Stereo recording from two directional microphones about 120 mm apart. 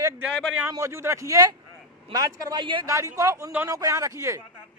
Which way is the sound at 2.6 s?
40° right (ahead or behind).